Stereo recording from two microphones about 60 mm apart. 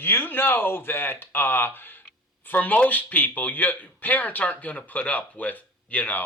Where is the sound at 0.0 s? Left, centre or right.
Left.